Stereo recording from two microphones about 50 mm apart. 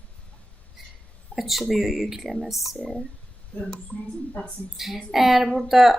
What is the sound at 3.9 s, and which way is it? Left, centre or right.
Speech, left.